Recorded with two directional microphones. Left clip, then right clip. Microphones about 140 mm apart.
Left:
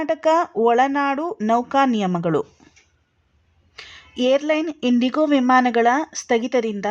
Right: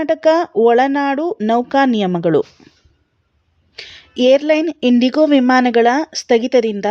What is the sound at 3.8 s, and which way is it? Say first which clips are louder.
A woman's voice: right 7 dB; 35° right (ahead or behind).